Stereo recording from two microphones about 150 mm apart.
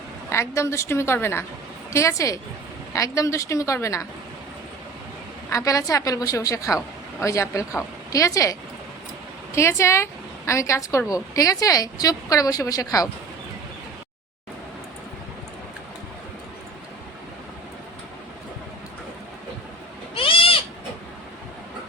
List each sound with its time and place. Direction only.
0.3 s a woman's voice: 20° left (ahead or behind)
5.5 s a woman's voice: 20° left (ahead or behind)
20.1 s cat: 35° left (ahead or behind)